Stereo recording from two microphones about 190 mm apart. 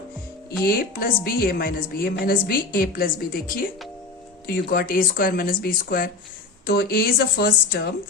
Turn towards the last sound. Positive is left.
turn(degrees=55)  # may be behind; listen again after turning